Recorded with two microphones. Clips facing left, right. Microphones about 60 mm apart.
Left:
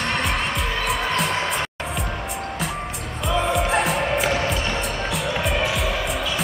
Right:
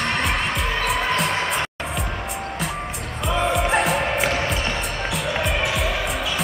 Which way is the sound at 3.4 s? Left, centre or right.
Centre.